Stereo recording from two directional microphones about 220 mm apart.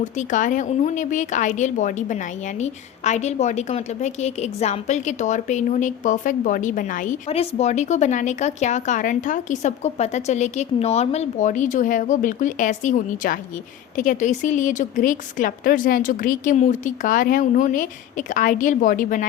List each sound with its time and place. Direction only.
0.0 s speech: 35° left (ahead or behind)